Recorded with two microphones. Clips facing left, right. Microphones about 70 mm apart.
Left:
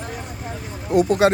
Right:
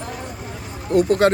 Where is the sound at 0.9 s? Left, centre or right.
Centre.